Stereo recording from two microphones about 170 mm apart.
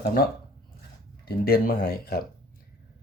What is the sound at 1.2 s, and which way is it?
Speech, 60° left (ahead or behind).